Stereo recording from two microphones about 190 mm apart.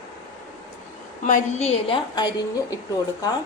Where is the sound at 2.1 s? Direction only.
20° left (ahead or behind).